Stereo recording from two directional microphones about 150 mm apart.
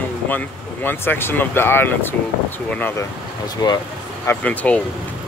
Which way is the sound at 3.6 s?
25° left (ahead or behind).